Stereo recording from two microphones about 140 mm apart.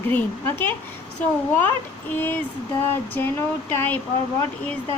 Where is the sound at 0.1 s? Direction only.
15° left (ahead or behind).